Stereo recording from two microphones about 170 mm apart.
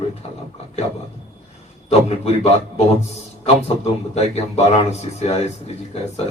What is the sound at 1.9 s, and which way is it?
Speech, 40° left (ahead or behind).